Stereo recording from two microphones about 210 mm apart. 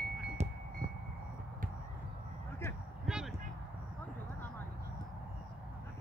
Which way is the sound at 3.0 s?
Centre (ahead or behind).